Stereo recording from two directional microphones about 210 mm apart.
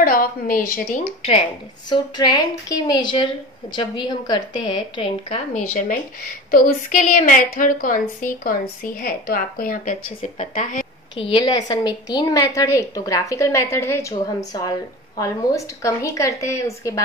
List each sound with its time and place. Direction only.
0.0 s speech: 45° left (ahead or behind)
1.9 s a woman's voice: 20° left (ahead or behind)
5.8 s a woman's voice: 40° left (ahead or behind)
10.0 s a woman's voice: 30° left (ahead or behind)
11.1 s a woman's voice: 25° left (ahead or behind)